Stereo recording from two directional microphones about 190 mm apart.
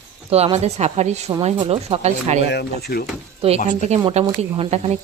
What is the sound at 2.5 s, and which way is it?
Speech, 55° left (ahead or behind).